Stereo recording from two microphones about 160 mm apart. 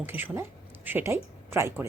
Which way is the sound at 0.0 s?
10° right (ahead or behind).